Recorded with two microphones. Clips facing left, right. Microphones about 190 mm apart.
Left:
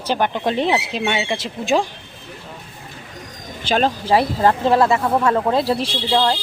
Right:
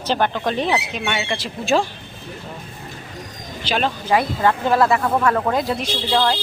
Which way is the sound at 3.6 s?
45° left (ahead or behind).